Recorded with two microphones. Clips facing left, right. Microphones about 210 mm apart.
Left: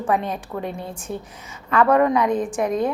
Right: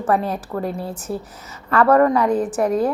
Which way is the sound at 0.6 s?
35° right (ahead or behind).